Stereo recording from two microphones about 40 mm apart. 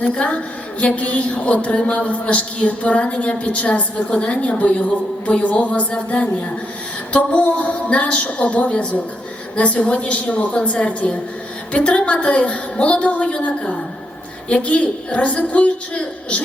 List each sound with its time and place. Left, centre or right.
0.1 s a woman's voice: left
7.3 s a woman's voice: left
14.5 s a woman's voice: left